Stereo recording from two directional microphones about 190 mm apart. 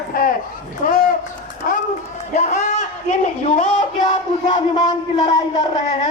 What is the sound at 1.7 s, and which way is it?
Run, 45° left (ahead or behind).